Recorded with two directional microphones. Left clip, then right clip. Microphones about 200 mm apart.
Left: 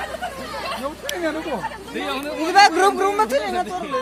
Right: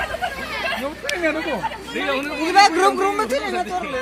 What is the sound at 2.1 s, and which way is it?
Speech, 55° left (ahead or behind).